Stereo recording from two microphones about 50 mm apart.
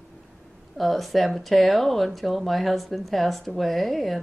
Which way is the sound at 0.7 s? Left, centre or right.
Centre.